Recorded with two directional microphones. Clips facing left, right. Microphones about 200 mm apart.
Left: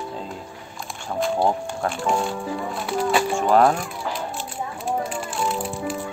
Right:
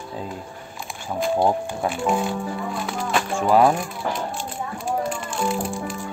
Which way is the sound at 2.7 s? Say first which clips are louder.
Left 4 dB; 5° left (ahead or behind).